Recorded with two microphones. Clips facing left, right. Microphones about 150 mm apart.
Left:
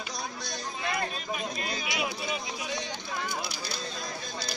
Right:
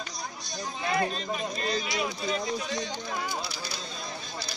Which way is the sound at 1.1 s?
5° left (ahead or behind).